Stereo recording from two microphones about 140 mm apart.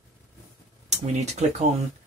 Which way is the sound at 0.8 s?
55° right (ahead or behind).